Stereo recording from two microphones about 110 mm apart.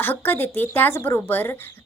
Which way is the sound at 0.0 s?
20° left (ahead or behind).